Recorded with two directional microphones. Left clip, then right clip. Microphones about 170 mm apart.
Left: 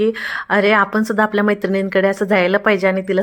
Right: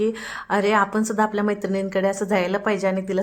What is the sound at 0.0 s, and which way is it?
Speech, 20° left (ahead or behind).